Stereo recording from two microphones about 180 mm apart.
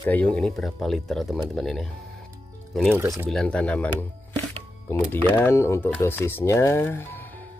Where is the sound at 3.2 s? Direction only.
5° left (ahead or behind).